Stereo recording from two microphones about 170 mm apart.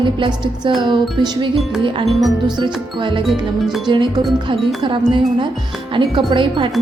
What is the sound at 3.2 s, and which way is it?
Speech, centre (ahead or behind).